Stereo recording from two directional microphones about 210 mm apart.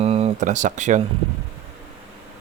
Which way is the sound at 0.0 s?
30° right (ahead or behind).